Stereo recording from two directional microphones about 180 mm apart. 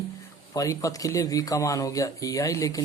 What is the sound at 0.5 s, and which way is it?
Speech, 20° left (ahead or behind).